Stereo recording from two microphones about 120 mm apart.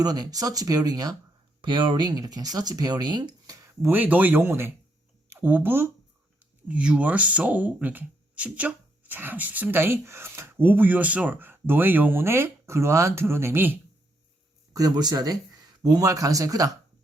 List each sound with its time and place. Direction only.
0.0 s speech: 35° right (ahead or behind)
1.6 s speech: 45° right (ahead or behind)
3.8 s speech: 15° right (ahead or behind)
14.7 s speech: 30° right (ahead or behind)